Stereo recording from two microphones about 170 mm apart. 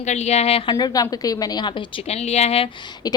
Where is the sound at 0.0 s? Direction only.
40° left (ahead or behind).